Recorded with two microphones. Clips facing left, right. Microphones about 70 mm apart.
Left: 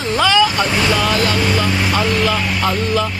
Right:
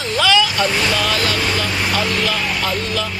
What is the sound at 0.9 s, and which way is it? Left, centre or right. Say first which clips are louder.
Speech: left 3 dB; left.